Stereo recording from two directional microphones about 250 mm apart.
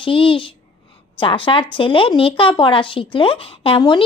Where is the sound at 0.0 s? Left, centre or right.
Left.